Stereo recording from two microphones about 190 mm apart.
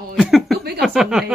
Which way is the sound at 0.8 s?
Centre (ahead or behind).